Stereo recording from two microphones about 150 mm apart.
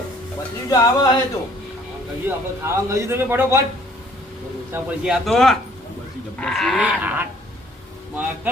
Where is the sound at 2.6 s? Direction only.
20° right (ahead or behind).